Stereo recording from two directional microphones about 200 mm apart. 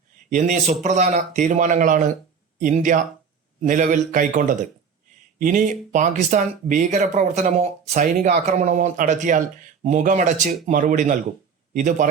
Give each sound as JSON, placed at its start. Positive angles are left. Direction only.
{"t": 0.3, "sound": "speech", "side_deg": -35}